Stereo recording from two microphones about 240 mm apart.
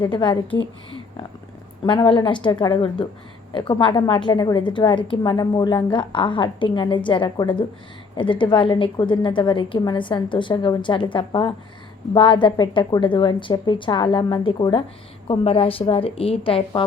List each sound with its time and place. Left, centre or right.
0.0 s a woman's voice: centre
1.8 s a woman's voice: centre